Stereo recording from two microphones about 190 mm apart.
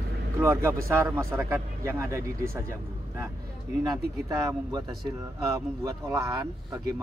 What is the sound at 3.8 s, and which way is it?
Speech, 20° right (ahead or behind).